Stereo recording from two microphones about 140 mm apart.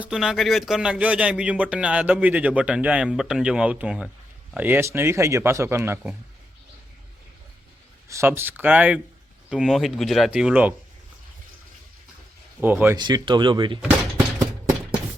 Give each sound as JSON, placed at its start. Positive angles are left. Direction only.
{"t": 0.0, "sound": "a man's voice", "side_deg": -5}
{"t": 8.0, "sound": "a sound", "side_deg": -20}
{"t": 8.3, "sound": "a man's voice", "side_deg": -15}
{"t": 12.5, "sound": "speech", "side_deg": -15}
{"t": 13.0, "sound": "speech", "side_deg": -30}